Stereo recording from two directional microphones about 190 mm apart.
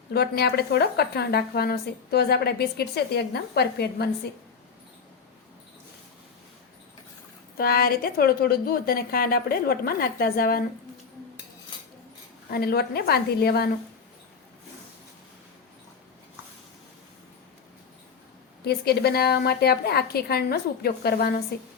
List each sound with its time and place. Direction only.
0.1 s a woman's voice: 55° left (ahead or behind)
7.5 s a woman's voice: 50° left (ahead or behind)
12.5 s a woman's voice: 55° left (ahead or behind)
18.6 s a woman's voice: 55° left (ahead or behind)